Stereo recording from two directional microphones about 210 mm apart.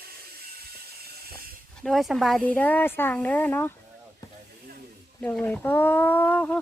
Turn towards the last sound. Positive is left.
turn(degrees=5)  # may be behind; listen again after turning